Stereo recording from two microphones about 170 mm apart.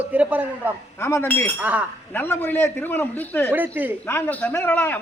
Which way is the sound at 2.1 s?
10° left (ahead or behind).